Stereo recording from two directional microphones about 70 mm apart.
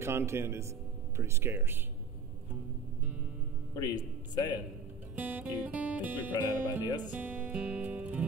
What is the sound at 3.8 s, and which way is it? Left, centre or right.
Speech, left.